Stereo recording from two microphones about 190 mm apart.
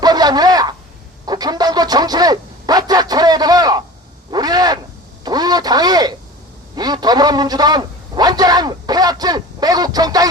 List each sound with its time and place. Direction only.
0.0 s radio: 20° right (ahead or behind)
1.2 s a man's voice: 20° right (ahead or behind)